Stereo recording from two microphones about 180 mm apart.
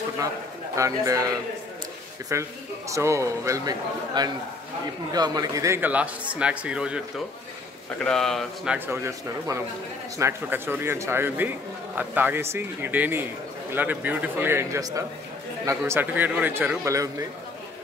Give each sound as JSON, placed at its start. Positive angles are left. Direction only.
{"t": 0.7, "sound": "a man's voice", "side_deg": -20}
{"t": 2.3, "sound": "a man's voice", "side_deg": -15}
{"t": 8.0, "sound": "speech", "side_deg": 5}
{"t": 8.7, "sound": "a man's voice", "side_deg": -10}